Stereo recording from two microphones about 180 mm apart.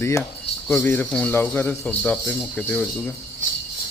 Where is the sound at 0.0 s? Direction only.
15° left (ahead or behind).